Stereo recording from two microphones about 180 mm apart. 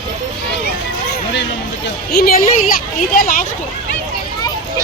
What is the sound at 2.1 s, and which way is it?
Speech, 55° left (ahead or behind).